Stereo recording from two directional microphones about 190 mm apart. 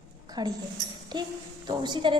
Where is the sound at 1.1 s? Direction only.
20° right (ahead or behind).